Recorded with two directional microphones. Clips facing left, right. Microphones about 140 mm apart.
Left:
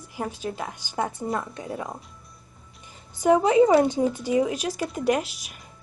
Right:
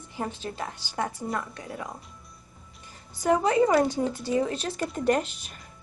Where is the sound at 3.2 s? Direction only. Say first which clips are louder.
Left 4 dB; 20° left (ahead or behind).